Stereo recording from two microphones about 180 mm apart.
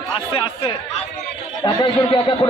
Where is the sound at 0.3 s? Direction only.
30° left (ahead or behind).